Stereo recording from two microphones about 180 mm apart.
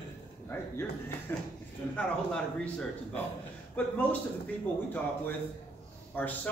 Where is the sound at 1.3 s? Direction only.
15° left (ahead or behind).